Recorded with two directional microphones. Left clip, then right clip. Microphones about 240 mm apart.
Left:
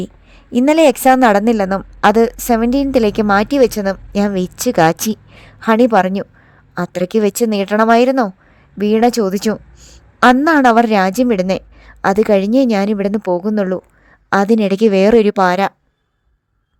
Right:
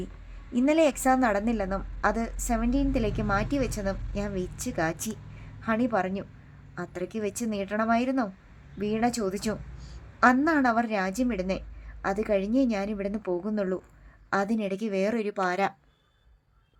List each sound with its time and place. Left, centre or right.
0.5 s a woman's voice: left